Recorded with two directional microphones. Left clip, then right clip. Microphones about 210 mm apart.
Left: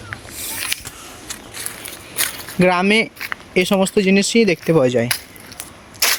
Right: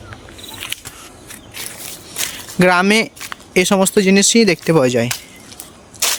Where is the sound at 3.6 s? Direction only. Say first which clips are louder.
Right 3 dB; 20° right (ahead or behind).